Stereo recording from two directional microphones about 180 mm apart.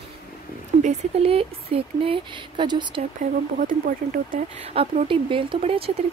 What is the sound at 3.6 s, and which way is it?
Speech, 50° right (ahead or behind).